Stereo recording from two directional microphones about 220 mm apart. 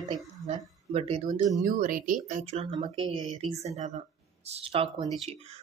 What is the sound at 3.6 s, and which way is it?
Speech, 30° right (ahead or behind).